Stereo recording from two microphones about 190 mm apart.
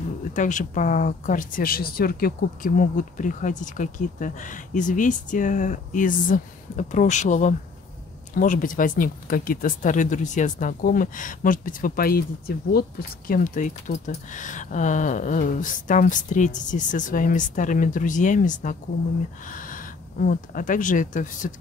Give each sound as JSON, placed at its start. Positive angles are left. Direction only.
{"t": 0.3, "sound": "speech", "side_deg": 40}